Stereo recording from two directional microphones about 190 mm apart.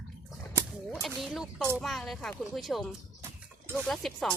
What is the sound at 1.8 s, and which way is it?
Speech, centre (ahead or behind).